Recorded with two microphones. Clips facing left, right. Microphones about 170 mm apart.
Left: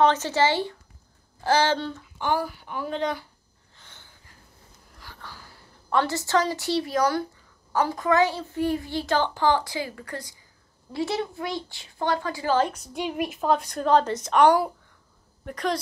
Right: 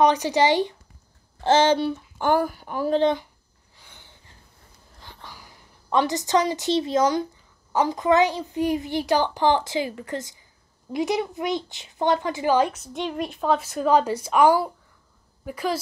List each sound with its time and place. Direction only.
0.0 s speech: 15° right (ahead or behind)
2.1 s speech: 50° right (ahead or behind)
3.7 s a sound: 15° right (ahead or behind)
4.9 s a woman's voice: 20° right (ahead or behind); by 13.0 s 5° right (ahead or behind)
13.0 s a woman's voice: 5° left (ahead or behind)